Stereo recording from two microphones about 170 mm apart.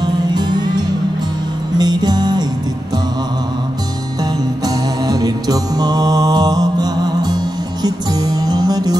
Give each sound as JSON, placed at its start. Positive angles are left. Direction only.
{"t": 0.0, "sound": "music", "side_deg": -25}
{"t": 4.2, "sound": "music", "side_deg": -20}